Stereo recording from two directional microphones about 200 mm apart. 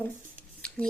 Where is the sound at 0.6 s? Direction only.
5° left (ahead or behind).